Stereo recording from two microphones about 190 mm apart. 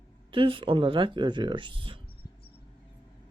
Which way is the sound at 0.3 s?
25° right (ahead or behind).